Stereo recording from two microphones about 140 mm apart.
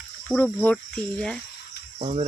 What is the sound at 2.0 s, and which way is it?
Cricket, 45° right (ahead or behind).